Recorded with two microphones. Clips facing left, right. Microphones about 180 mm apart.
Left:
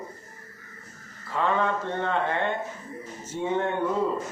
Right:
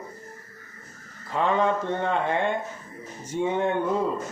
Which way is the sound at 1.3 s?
15° right (ahead or behind).